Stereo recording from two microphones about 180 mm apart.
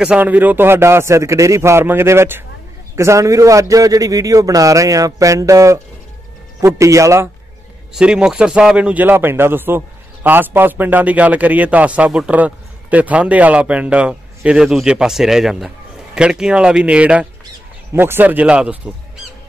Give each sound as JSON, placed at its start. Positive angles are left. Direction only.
{"t": 0.0, "sound": "a man's voice", "side_deg": -5}
{"t": 7.9, "sound": "a man's voice", "side_deg": -5}